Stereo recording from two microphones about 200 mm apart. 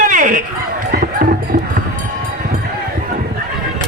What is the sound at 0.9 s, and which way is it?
Fowl, 45° right (ahead or behind).